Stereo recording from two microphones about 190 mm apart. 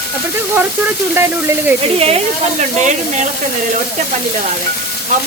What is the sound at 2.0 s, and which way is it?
Speech, 30° right (ahead or behind).